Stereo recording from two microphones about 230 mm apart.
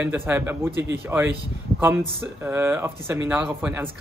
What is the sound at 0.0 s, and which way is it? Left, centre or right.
Speech, centre.